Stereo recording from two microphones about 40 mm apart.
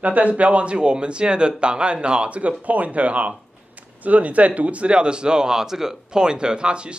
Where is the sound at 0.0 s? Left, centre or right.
Right.